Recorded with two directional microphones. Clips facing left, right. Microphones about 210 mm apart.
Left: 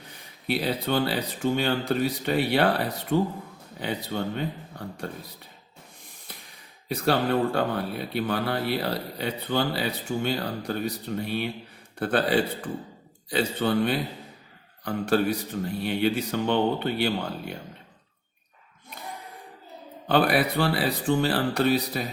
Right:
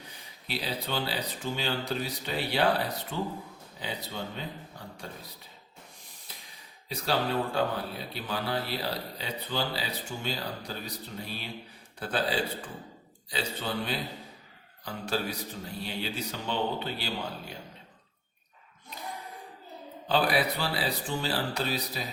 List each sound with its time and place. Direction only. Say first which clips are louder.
0.4 s speech: left 8 dB; 55° left (ahead or behind)
6.8 s speech: left 6 dB; 55° left (ahead or behind)
20.1 s speech: left 5 dB; 55° left (ahead or behind)